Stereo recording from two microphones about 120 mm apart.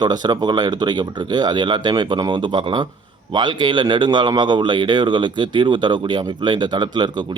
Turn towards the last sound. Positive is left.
turn(degrees=-40)  # may be behind; listen again after turning